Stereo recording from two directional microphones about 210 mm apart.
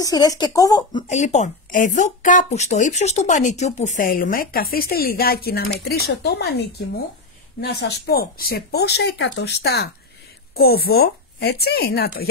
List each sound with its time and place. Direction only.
0.0 s speech: 15° left (ahead or behind)
1.0 s speech: 35° left (ahead or behind); by 6.6 s 50° left (ahead or behind)
7.6 s speech: 50° left (ahead or behind)